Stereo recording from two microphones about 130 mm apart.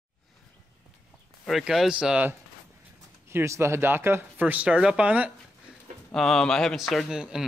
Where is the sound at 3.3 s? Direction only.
20° right (ahead or behind).